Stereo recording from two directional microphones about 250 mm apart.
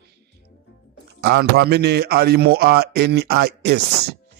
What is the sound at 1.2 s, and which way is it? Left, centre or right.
Speech, right.